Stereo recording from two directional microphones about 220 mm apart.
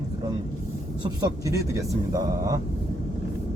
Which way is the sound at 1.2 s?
15° right (ahead or behind).